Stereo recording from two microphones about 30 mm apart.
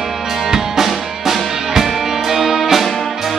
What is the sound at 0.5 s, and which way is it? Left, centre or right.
Music, centre.